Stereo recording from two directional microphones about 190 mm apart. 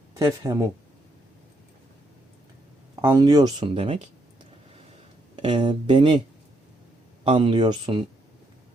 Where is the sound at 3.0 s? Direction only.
15° right (ahead or behind).